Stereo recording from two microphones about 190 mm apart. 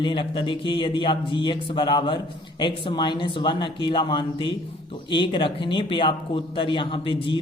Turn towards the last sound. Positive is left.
turn(degrees=25)  # may be behind; listen again after turning